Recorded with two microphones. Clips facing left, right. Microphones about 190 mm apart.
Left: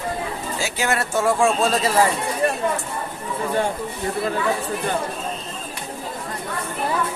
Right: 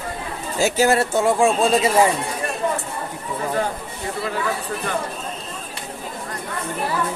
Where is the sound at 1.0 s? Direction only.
20° right (ahead or behind).